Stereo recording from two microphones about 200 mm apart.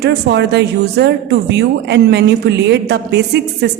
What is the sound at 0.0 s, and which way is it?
Speech, 60° right (ahead or behind).